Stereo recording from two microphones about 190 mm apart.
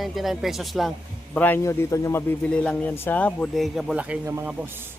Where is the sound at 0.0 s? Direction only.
Centre (ahead or behind).